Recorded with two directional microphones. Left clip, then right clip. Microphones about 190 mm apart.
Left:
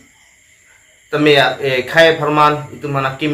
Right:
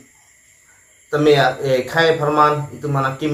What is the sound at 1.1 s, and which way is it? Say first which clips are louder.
A man's voice: left 2 dB; 15° left (ahead or behind).